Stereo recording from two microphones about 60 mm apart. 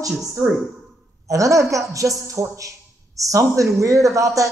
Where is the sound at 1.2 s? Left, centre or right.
Right.